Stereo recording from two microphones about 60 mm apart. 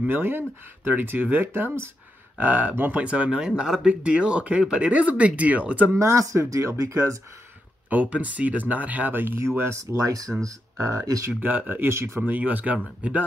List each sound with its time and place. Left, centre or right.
0.0 s speech: right
5.9 s speech: right
7.9 s speech: right
10.0 s speech: right
10.8 s speech: right
11.4 s speech: right
11.9 s speech: right
12.2 s speech: right